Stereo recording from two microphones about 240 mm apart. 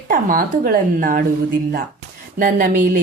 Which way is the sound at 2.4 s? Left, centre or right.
Right.